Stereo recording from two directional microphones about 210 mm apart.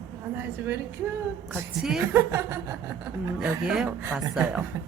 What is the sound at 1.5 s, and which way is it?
Speech, 5° right (ahead or behind).